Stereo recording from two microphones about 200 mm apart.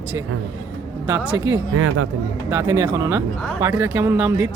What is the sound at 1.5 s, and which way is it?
Speech, 90° right.